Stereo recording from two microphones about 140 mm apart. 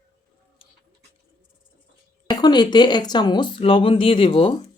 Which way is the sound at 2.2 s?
30° left (ahead or behind).